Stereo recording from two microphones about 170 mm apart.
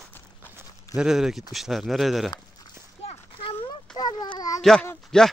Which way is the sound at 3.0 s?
35° left (ahead or behind).